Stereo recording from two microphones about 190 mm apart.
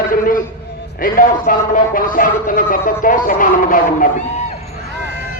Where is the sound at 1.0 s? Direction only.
50° left (ahead or behind).